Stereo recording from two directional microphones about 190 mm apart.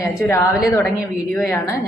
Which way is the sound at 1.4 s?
15° left (ahead or behind).